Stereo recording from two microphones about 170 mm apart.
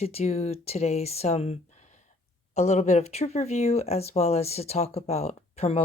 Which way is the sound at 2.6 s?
40° left (ahead or behind).